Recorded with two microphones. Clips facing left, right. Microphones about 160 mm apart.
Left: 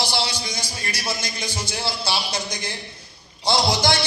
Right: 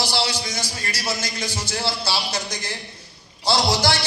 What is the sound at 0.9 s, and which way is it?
A man's voice, 15° left (ahead or behind).